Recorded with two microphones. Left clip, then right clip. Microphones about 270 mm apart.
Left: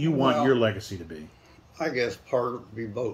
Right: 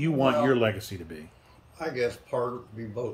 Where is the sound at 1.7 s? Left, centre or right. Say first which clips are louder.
Left 2 dB; centre.